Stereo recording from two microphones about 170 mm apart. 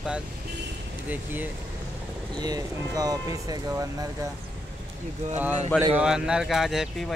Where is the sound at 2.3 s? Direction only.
25° right (ahead or behind).